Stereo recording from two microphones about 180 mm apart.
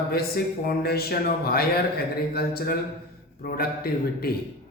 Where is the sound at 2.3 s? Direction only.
60° left (ahead or behind).